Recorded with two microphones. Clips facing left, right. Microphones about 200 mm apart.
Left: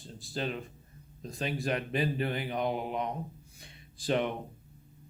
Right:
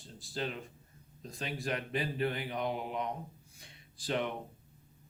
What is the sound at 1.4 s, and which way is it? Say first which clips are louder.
Speech: left 5 dB; 20° left (ahead or behind).